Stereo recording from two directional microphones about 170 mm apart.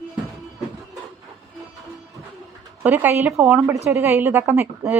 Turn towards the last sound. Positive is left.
turn(degrees=-15)  # may be behind; listen again after turning